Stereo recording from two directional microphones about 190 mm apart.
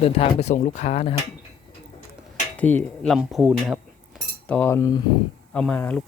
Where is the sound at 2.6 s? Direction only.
10° left (ahead or behind).